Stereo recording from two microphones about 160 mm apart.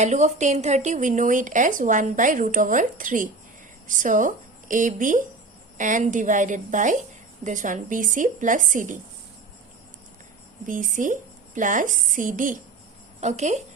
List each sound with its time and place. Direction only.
0.0 s speech: 45° right (ahead or behind)
10.7 s speech: 55° right (ahead or behind)